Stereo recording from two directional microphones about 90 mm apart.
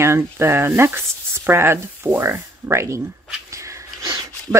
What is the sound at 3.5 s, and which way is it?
Sniff, 35° right (ahead or behind).